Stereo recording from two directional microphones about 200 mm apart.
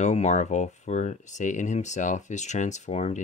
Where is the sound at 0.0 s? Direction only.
35° left (ahead or behind).